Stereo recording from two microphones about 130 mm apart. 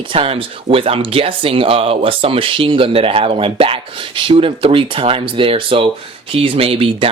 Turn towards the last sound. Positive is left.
turn(degrees=-45)  # may be behind; listen again after turning